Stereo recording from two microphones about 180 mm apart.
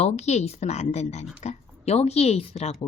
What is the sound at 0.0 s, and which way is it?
A woman's voice, 40° left (ahead or behind).